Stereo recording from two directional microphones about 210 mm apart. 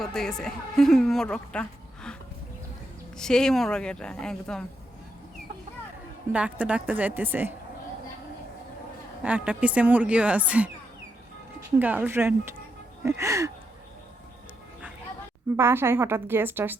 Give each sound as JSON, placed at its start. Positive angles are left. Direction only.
{"t": 0.0, "sound": "a woman's voice", "side_deg": 0}
{"t": 3.2, "sound": "a woman's voice", "side_deg": 5}
{"t": 6.3, "sound": "a woman's voice", "side_deg": -5}
{"t": 9.2, "sound": "a woman's voice", "side_deg": -5}
{"t": 11.8, "sound": "a woman's voice", "side_deg": -10}
{"t": 15.5, "sound": "a woman's voice", "side_deg": -10}